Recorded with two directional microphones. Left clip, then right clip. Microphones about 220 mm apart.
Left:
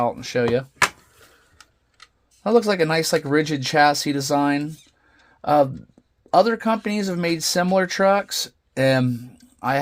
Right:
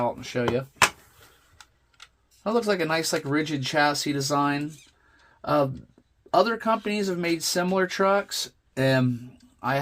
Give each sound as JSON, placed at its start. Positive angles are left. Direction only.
{"t": 0.0, "sound": "speech", "side_deg": 45}
{"t": 2.4, "sound": "speech", "side_deg": 45}